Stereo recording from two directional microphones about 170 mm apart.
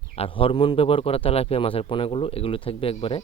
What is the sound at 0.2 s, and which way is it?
Speech, 30° left (ahead or behind).